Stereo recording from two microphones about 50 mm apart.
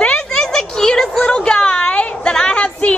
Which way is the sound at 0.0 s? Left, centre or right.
Centre.